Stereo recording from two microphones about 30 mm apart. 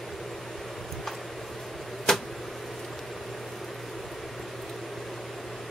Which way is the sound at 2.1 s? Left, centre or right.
Left.